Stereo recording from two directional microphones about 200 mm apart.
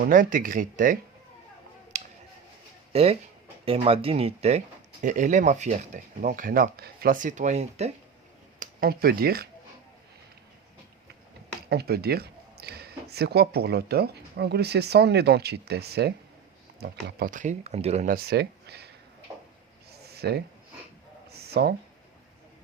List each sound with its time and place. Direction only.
0.1 s speech: 40° right (ahead or behind)
1.9 s a sound: 35° right (ahead or behind)
2.9 s speech: 30° right (ahead or behind)
8.5 s speech: 45° right (ahead or behind)
11.7 s speech: 55° right (ahead or behind)
19.9 s a sound: 55° right (ahead or behind)
21.4 s speech: 55° right (ahead or behind)